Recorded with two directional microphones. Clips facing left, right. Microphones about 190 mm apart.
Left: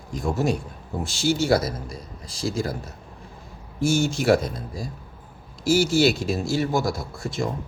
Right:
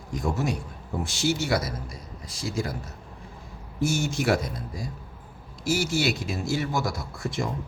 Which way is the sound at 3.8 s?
30° left (ahead or behind).